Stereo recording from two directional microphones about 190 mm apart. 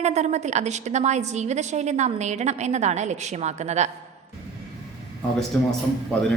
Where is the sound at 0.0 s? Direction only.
35° right (ahead or behind).